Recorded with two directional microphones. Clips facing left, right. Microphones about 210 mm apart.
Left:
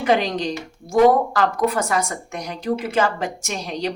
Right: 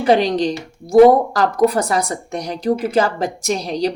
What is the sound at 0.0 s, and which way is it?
A woman's voice, 35° right (ahead or behind).